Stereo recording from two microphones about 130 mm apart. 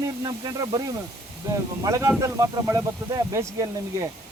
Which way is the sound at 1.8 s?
25° right (ahead or behind).